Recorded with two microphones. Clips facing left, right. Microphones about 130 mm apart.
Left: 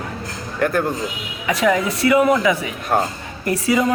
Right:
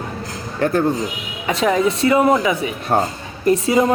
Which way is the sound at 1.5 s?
30° right (ahead or behind).